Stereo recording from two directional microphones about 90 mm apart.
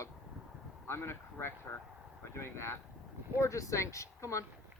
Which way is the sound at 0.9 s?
25° left (ahead or behind).